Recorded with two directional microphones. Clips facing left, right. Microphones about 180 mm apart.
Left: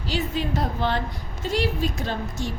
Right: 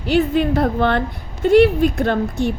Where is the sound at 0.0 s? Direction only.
60° right (ahead or behind).